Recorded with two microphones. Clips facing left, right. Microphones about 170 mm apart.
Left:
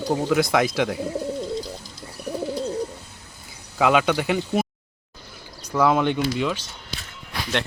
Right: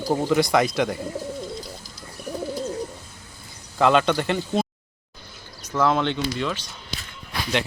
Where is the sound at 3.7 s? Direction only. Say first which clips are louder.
Even; 5° left (ahead or behind).